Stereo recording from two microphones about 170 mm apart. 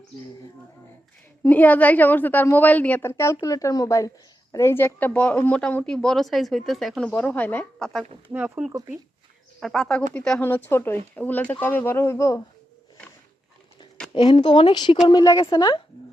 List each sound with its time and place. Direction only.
1.5 s speech: 10° left (ahead or behind)
8.3 s speech: 10° right (ahead or behind); by 12.4 s 15° left (ahead or behind)
14.1 s speech: 30° left (ahead or behind)